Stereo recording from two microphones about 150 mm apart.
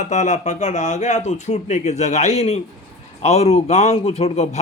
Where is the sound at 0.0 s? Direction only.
50° left (ahead or behind).